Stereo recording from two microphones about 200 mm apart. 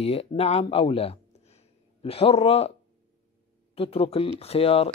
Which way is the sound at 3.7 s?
30° left (ahead or behind).